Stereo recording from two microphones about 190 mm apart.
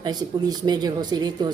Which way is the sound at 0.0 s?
20° right (ahead or behind).